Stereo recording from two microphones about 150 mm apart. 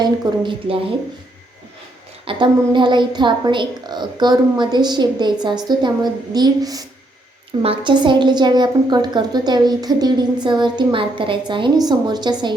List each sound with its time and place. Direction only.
0.0 s a woman's voice: 35° right (ahead or behind)
2.2 s a woman's voice: 30° right (ahead or behind)
7.6 s a woman's voice: 35° right (ahead or behind)